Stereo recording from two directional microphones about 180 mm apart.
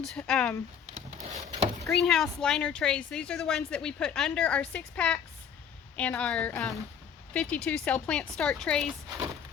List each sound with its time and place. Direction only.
0.3 s speech: 5° left (ahead or behind)
1.5 s vehicle: 35° right (ahead or behind)
1.9 s a woman's voice: centre (ahead or behind)
8.9 s speech: 20° right (ahead or behind)